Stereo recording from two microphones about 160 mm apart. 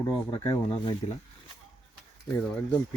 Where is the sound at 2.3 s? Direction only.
10° left (ahead or behind).